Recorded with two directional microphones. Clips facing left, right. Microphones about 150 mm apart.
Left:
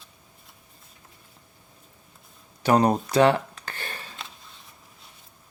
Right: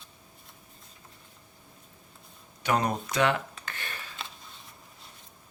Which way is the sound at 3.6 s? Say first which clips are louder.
Left 3 dB; 35° left (ahead or behind).